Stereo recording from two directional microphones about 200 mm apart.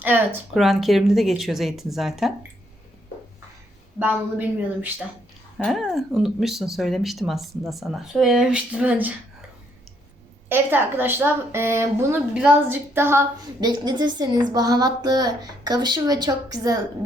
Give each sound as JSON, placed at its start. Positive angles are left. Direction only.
{"t": 0.0, "sound": "speech", "side_deg": -10}
{"t": 4.0, "sound": "a woman's voice", "side_deg": -10}
{"t": 5.5, "sound": "speech", "side_deg": 0}
{"t": 10.5, "sound": "a woman's voice", "side_deg": -10}